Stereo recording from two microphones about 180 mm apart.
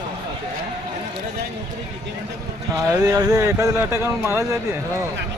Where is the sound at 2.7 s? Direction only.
15° right (ahead or behind).